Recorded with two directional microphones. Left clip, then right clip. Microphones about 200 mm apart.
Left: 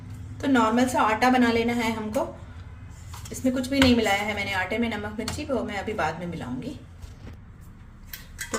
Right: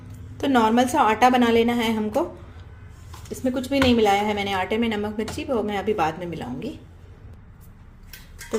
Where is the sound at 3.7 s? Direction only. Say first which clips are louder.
Right 3 dB; 40° right (ahead or behind).